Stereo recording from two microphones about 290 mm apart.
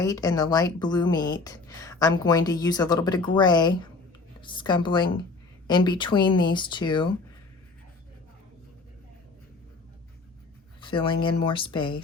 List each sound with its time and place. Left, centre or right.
0.0 s a woman's voice: centre
10.8 s a woman's voice: centre